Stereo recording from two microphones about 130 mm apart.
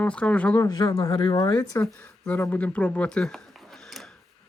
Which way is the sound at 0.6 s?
30° left (ahead or behind).